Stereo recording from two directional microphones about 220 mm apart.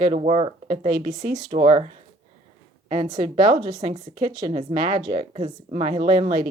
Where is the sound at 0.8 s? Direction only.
40° right (ahead or behind).